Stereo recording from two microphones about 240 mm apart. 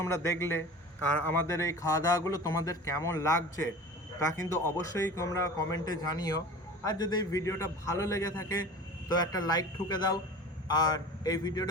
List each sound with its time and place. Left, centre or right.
0.0 s speech: centre